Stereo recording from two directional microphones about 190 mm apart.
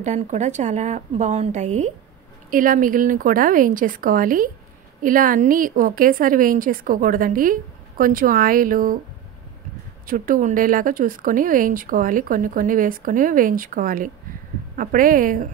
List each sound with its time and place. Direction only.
0.0 s a woman's voice: 40° right (ahead or behind)
10.0 s speech: 45° right (ahead or behind)